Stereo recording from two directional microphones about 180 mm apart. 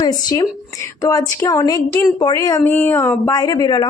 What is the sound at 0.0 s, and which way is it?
A woman's voice, 20° left (ahead or behind).